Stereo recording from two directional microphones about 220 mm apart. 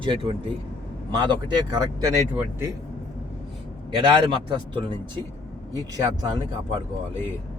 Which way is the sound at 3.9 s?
20° right (ahead or behind).